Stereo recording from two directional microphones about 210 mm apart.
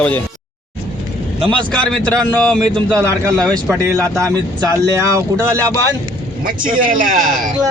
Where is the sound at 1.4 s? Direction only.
25° right (ahead or behind).